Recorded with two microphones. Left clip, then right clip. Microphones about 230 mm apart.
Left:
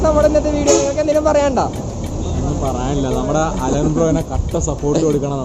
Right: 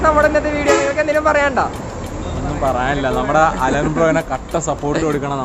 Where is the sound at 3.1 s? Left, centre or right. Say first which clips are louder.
Right 6 dB; centre.